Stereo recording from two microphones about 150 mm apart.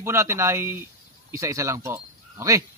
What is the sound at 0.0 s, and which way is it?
Speech, 20° right (ahead or behind).